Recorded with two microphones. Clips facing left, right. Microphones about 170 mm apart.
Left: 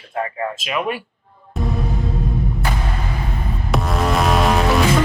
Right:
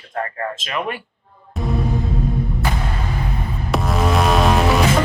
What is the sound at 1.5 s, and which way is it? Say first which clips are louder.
Music: right 2 dB; centre (ahead or behind).